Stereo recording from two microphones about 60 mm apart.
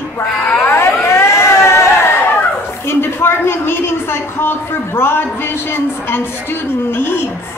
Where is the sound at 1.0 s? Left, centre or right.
Left.